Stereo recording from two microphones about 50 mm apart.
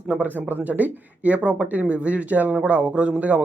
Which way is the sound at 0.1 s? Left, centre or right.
Right.